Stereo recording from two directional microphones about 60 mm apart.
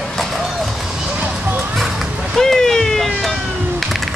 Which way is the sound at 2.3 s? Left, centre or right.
Centre.